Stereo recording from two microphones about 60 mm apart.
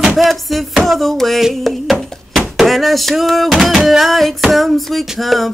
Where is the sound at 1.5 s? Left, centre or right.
Centre.